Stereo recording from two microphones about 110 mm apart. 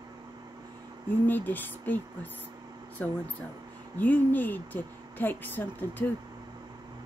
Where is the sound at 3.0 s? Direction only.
15° left (ahead or behind).